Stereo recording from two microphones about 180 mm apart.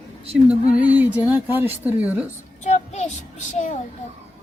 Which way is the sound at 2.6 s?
40° left (ahead or behind).